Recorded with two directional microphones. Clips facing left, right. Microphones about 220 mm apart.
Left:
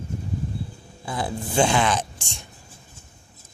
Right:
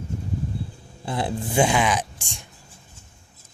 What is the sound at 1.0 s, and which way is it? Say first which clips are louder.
Speech: right 2 dB; 25° right (ahead or behind).